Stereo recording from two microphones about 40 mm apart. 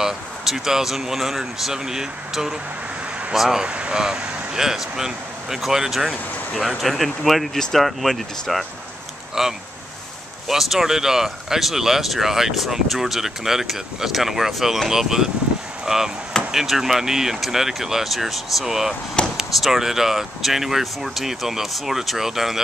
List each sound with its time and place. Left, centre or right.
0.0 s speech: centre
3.6 s speech: right
4.6 s speech: centre
15.8 s chop: centre
16.5 s speech: centre
19.2 s speech: left
19.5 s speech: centre